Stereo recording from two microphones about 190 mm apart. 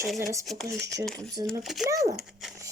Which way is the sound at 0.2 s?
15° right (ahead or behind).